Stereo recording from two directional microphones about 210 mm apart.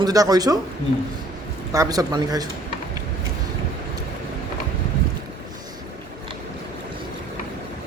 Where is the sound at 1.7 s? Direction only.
15° right (ahead or behind).